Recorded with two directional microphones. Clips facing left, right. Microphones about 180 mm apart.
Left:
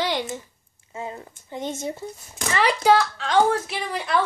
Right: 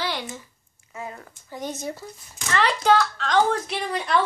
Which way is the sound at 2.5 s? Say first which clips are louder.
Left 1 dB; 10° left (ahead or behind).